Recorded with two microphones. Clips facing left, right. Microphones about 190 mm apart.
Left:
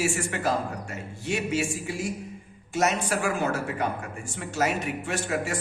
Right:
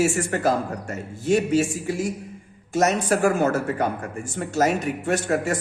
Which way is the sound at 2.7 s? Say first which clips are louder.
Right 5 dB; 45° right (ahead or behind).